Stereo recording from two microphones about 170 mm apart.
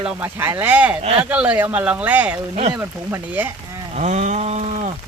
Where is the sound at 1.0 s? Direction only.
35° right (ahead or behind).